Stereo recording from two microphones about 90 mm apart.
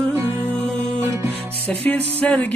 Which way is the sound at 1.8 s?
15° left (ahead or behind).